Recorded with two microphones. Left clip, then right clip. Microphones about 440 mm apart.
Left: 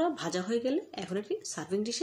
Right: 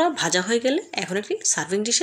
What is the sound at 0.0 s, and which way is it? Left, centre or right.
Speech, right.